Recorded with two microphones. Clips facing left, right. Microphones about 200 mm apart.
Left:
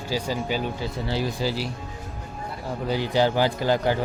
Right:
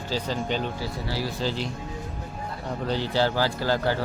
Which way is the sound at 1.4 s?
10° left (ahead or behind).